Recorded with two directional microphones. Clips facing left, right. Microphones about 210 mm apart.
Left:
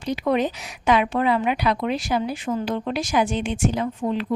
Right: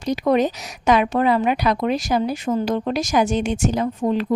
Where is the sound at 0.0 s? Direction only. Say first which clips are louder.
Right 4 dB; 40° right (ahead or behind).